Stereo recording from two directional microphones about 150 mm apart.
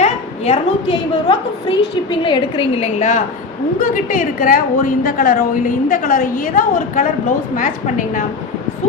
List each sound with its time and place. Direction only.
0.0 s a sound: 50° left (ahead or behind)
1.3 s a woman's voice: 30° left (ahead or behind)
3.8 s a woman's voice: 65° left (ahead or behind)